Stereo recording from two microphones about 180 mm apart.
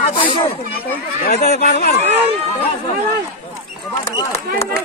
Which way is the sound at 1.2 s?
40° left (ahead or behind).